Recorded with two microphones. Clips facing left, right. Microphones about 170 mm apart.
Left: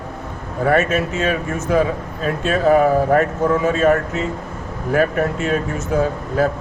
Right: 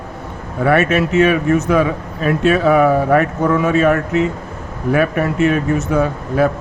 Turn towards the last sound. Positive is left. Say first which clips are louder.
# right 2 dB
turn(degrees=-65)  # may be behind; listen again after turning